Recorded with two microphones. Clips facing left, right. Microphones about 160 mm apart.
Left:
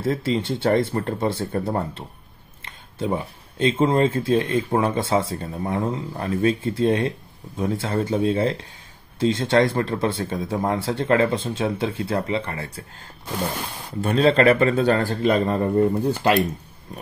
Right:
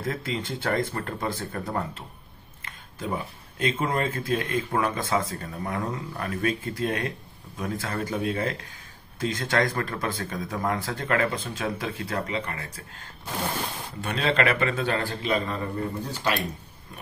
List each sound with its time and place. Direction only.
0.0 s speech: 25° left (ahead or behind)
14.0 s a man's voice: 35° left (ahead or behind); by 16.3 s 55° left (ahead or behind)